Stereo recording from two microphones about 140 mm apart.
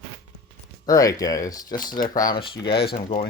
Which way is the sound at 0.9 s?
25° left (ahead or behind).